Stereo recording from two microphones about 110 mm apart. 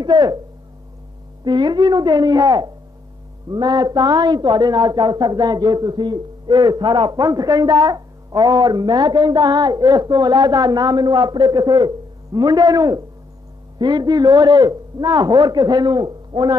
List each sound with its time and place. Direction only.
0.0 s speech: 40° right (ahead or behind)
1.4 s speech: 40° right (ahead or behind)